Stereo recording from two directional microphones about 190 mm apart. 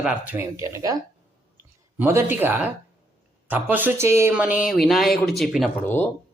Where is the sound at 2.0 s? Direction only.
10° right (ahead or behind).